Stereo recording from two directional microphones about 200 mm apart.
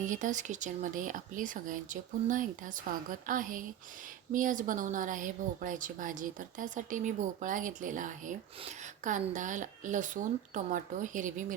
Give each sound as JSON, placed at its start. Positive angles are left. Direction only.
{"t": 0.1, "sound": "a woman's voice", "side_deg": -40}